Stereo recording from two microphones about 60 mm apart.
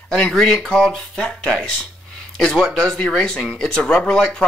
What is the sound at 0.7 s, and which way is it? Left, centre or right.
Speech, centre.